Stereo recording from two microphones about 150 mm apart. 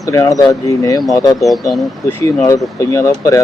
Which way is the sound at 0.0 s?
20° left (ahead or behind).